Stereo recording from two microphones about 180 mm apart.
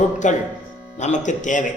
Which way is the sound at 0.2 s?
45° left (ahead or behind).